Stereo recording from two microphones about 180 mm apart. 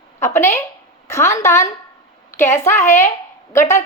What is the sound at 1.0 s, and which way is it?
Speech, 15° left (ahead or behind).